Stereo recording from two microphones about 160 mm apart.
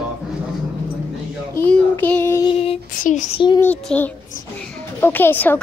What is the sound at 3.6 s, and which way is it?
Speech, 10° left (ahead or behind).